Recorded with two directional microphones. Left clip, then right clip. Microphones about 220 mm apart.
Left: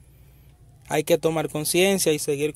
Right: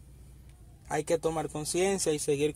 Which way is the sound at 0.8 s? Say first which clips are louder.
Left 8 dB; 35° left (ahead or behind).